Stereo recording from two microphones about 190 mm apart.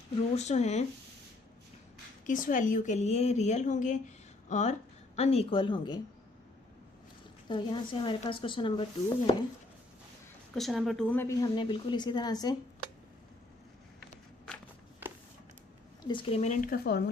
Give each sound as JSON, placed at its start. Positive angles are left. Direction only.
{"t": 0.3, "sound": "a woman's voice", "side_deg": 35}
{"t": 2.2, "sound": "a woman's voice", "side_deg": 45}
{"t": 7.4, "sound": "a woman's voice", "side_deg": 25}
{"t": 10.5, "sound": "a woman's voice", "side_deg": 0}
{"t": 16.0, "sound": "speech", "side_deg": 25}